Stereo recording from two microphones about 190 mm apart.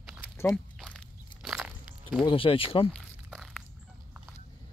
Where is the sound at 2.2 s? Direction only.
30° left (ahead or behind).